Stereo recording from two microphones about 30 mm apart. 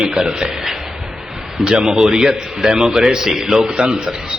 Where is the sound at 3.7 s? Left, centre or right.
Right.